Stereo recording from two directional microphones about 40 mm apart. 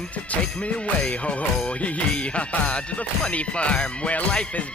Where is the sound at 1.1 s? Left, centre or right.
Left.